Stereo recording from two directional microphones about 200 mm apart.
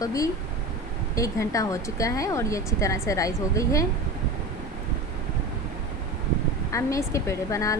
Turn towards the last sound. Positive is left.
turn(degrees=15)  # may be behind; listen again after turning